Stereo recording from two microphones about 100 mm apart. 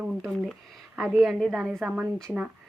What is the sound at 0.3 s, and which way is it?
A woman's voice, centre (ahead or behind).